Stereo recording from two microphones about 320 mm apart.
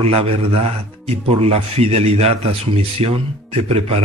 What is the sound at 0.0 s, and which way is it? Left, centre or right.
Speech, centre.